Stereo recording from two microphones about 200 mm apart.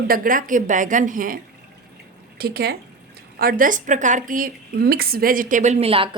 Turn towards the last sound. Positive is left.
turn(degrees=-30)  # may be behind; listen again after turning